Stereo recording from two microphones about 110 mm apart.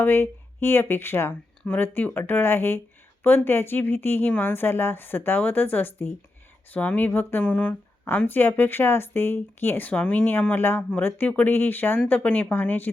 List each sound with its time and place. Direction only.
0.0 s speech: 20° left (ahead or behind)